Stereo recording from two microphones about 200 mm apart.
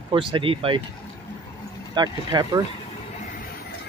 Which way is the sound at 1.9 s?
20° right (ahead or behind).